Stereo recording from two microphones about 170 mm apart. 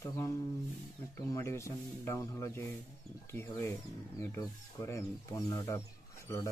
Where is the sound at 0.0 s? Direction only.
15° left (ahead or behind).